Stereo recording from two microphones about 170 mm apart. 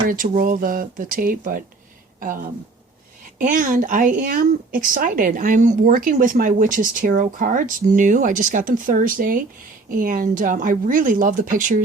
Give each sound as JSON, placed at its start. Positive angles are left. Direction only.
{"t": 0.1, "sound": "speech", "side_deg": -55}
{"t": 3.3, "sound": "speech", "side_deg": -50}